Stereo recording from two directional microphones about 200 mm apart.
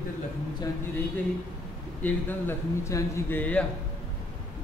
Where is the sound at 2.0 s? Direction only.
10° left (ahead or behind).